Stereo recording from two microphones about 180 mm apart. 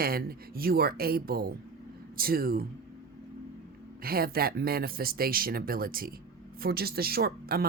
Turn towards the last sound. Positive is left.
turn(degrees=-55)  # may be behind; listen again after turning